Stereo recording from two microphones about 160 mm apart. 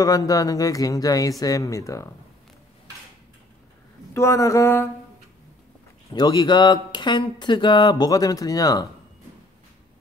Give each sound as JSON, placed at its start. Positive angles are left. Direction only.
{"t": 0.0, "sound": "speech", "side_deg": 20}
{"t": 4.1, "sound": "speech", "side_deg": 20}
{"t": 6.1, "sound": "speech", "side_deg": 25}